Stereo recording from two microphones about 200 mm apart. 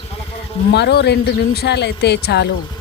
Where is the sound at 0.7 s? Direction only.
55° left (ahead or behind).